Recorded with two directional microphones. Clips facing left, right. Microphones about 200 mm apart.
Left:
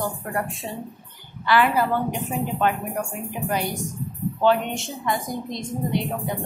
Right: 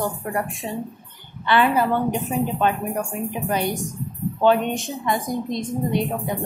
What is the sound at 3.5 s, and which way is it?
A woman's voice, 20° right (ahead or behind).